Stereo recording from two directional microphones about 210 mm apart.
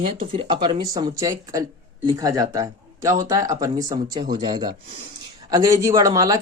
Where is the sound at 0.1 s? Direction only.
25° right (ahead or behind).